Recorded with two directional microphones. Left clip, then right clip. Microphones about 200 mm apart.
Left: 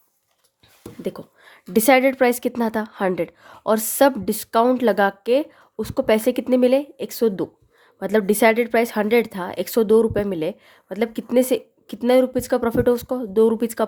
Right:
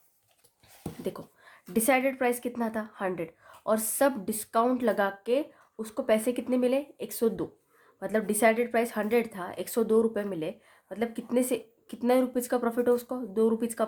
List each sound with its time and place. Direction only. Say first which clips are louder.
1.0 s a woman's voice: left 7 dB; 35° left (ahead or behind)